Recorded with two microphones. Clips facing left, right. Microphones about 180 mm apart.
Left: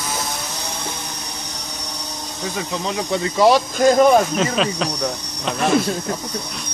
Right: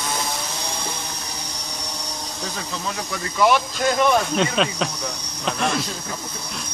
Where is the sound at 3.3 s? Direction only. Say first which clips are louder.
Left 4 dB; 35° left (ahead or behind).